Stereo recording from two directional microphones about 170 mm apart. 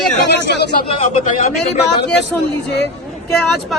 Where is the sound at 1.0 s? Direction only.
45° left (ahead or behind).